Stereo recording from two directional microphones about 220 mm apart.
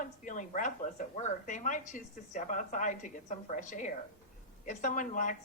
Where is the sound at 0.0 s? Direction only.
35° left (ahead or behind).